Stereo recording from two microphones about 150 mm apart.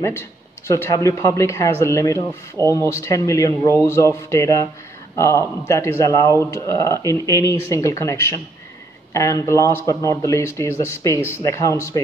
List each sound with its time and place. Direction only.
0.0 s speech: 20° left (ahead or behind)